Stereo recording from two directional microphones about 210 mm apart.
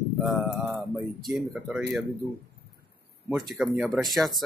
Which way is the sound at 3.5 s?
5° right (ahead or behind).